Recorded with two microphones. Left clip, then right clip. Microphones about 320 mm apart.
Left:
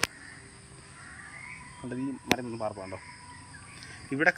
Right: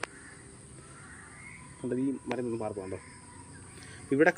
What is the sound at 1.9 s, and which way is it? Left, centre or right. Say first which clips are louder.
Speech: left 3 dB; centre.